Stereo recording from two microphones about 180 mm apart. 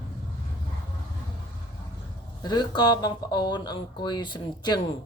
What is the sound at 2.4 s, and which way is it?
Speech, 25° left (ahead or behind).